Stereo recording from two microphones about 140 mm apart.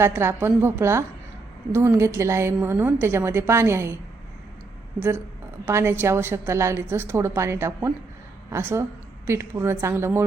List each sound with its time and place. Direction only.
0.0 s a woman's voice: 20° right (ahead or behind)
4.9 s a woman's voice: 15° right (ahead or behind)